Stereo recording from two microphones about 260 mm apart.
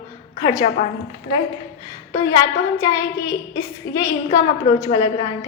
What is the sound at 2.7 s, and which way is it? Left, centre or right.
A woman's voice, centre.